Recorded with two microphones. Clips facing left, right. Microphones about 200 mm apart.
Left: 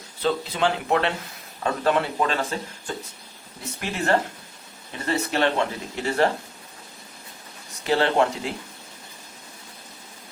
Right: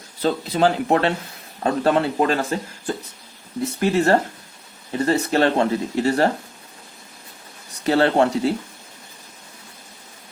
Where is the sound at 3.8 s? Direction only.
35° right (ahead or behind).